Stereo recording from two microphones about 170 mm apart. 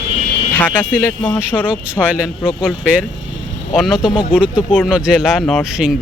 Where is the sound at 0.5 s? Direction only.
10° left (ahead or behind).